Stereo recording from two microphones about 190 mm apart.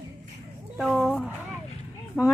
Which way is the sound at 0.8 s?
Centre (ahead or behind).